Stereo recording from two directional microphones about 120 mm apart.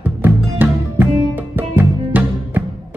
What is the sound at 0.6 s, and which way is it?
Music, 15° right (ahead or behind).